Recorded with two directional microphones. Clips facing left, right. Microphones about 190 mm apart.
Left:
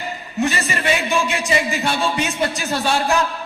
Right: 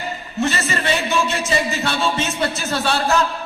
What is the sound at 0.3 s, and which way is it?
A man's voice, 15° left (ahead or behind).